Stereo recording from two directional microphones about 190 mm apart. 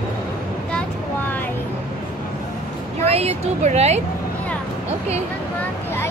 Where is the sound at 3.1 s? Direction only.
35° right (ahead or behind).